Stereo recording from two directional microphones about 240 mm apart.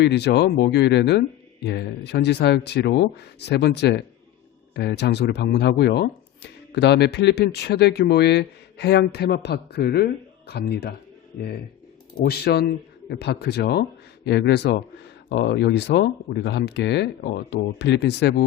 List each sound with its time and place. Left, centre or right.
0.0 s speech: left
12.2 s speech: left